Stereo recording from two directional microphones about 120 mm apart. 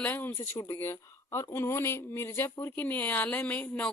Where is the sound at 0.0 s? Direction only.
15° left (ahead or behind).